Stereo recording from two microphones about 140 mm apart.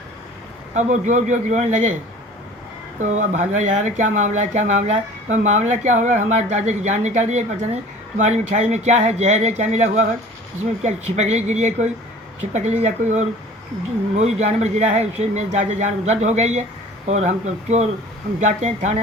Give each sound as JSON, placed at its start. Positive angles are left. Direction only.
{"t": 0.7, "sound": "speech", "side_deg": -60}
{"t": 3.0, "sound": "speech", "side_deg": -60}